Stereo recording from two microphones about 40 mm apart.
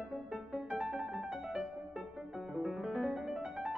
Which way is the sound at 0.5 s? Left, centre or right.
Centre.